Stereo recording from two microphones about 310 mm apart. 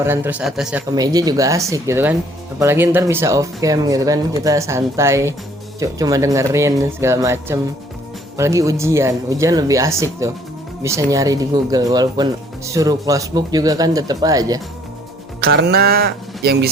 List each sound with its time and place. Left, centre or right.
0.0 s speech: centre
15.4 s speech: right